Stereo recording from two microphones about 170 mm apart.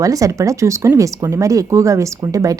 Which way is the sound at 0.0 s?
20° right (ahead or behind).